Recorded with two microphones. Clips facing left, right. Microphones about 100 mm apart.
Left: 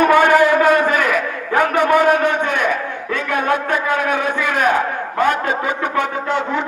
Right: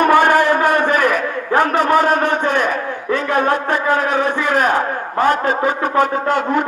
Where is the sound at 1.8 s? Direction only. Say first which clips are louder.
Left 1 dB; 40° right (ahead or behind).